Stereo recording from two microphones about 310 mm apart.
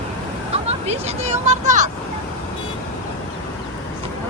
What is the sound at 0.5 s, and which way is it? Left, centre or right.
Vehicle, centre.